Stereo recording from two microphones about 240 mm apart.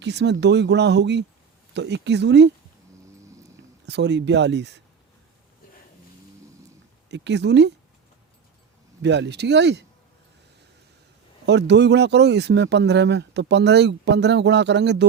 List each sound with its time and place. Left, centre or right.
0.0 s speech: right
3.8 s speech: right
7.1 s speech: right
9.0 s speech: right
11.4 s speech: right